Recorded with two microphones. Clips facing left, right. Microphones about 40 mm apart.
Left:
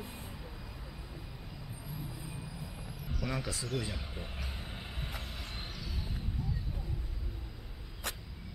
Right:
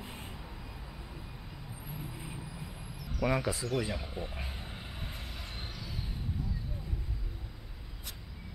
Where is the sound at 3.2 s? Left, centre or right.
Right.